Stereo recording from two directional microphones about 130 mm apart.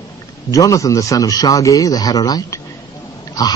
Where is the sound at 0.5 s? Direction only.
25° left (ahead or behind).